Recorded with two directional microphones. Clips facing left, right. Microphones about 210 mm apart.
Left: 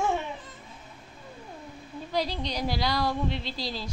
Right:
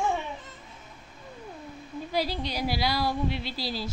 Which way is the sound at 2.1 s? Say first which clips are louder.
Even; 5° right (ahead or behind).